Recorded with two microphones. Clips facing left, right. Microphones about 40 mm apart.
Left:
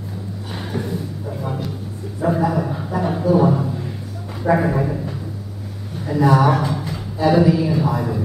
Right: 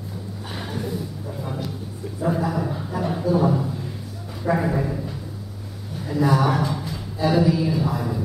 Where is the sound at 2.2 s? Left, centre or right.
Centre.